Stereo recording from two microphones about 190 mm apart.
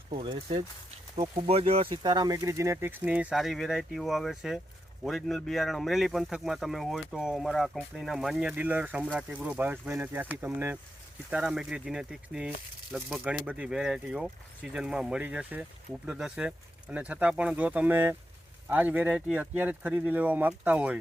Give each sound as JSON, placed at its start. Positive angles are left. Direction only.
{"t": 0.1, "sound": "speech", "side_deg": -25}